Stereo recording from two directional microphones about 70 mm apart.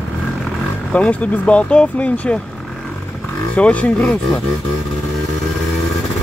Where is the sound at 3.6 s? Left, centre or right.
Centre.